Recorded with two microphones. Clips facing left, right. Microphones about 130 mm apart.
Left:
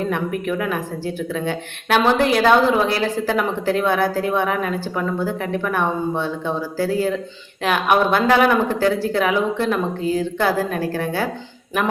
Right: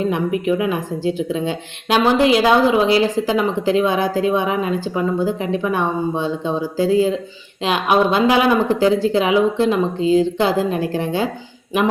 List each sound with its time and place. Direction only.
0.4 s speech: 15° right (ahead or behind)